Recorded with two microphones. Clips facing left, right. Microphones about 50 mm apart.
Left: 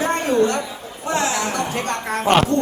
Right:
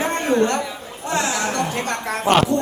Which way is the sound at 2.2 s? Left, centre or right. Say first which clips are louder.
Even; centre.